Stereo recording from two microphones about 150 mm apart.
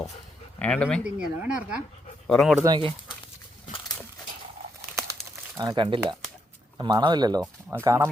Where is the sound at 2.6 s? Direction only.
30° right (ahead or behind).